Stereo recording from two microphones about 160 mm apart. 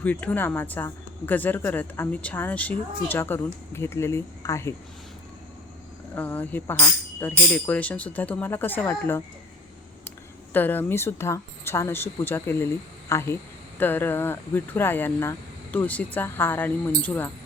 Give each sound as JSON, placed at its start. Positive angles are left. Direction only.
{"t": 0.0, "sound": "speech", "side_deg": 10}
{"t": 6.1, "sound": "speech", "side_deg": 10}
{"t": 10.5, "sound": "speech", "side_deg": 10}